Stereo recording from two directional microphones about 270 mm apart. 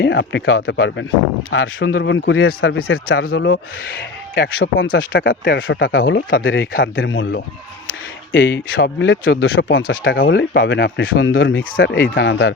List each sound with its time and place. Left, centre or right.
0.0 s speech: left
2.0 s speech: left
2.7 s speech: left
3.1 s speech: left
5.3 s speech: left
8.3 s speech: left
10.0 s speech: left